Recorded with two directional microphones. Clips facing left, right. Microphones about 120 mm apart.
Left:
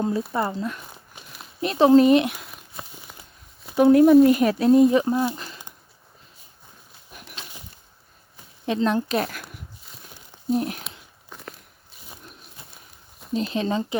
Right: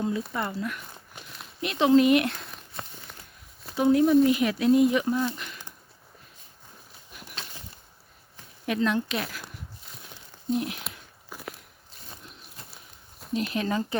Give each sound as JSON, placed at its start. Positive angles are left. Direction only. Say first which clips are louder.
{"t": 0.3, "sound": "speech", "louder": "left 5 dB", "side_deg": 30}
{"t": 2.4, "sound": "a sound", "louder": "even", "side_deg": 5}
{"t": 3.8, "sound": "speech", "louder": "left 6 dB", "side_deg": 55}
{"t": 4.4, "sound": "speech", "louder": "left 5 dB", "side_deg": 40}
{"t": 8.6, "sound": "speech", "louder": "left 3 dB", "side_deg": 30}
{"t": 9.1, "sound": "speech", "louder": "left 7 dB", "side_deg": 55}
{"t": 10.5, "sound": "speech", "louder": "left 4 dB", "side_deg": 40}
{"t": 11.3, "sound": "walk", "louder": "right 1 dB", "side_deg": -5}
{"t": 12.7, "sound": "a sound", "louder": "left 1 dB", "side_deg": 0}
{"t": 13.3, "sound": "speech", "louder": "left 3 dB", "side_deg": 25}